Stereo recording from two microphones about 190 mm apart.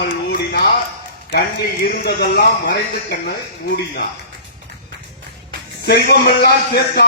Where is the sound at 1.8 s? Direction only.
55° left (ahead or behind).